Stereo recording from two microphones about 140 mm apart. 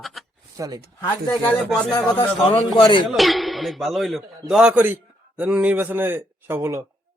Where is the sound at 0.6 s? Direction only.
25° right (ahead or behind).